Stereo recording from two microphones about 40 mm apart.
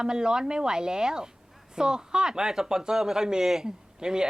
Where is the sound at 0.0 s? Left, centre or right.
Centre.